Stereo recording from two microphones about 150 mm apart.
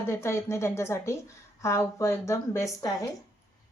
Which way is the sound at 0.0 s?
15° left (ahead or behind).